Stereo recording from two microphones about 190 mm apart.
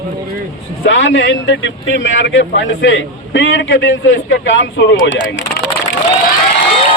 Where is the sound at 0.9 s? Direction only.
70° left (ahead or behind).